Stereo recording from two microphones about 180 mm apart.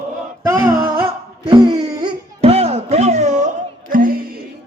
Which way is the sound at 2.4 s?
35° right (ahead or behind).